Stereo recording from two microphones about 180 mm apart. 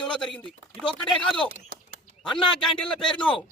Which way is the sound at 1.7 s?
60° right (ahead or behind).